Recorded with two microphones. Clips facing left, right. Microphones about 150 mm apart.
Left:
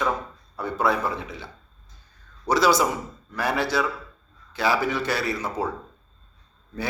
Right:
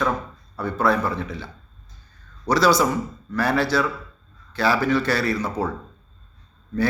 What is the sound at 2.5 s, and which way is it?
A man's voice, 20° left (ahead or behind).